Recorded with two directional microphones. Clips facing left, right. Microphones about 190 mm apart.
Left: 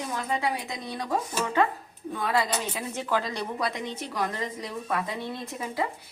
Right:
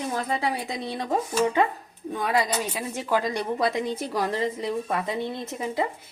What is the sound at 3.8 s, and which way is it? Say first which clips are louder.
A woman's voice: right 4 dB; 35° right (ahead or behind).